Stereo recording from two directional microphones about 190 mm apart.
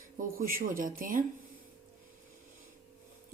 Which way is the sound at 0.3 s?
50° right (ahead or behind).